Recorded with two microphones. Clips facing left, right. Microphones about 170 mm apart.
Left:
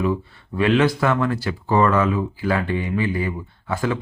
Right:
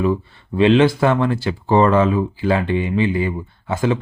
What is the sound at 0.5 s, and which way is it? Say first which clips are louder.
Speech: right 5 dB; 25° right (ahead or behind).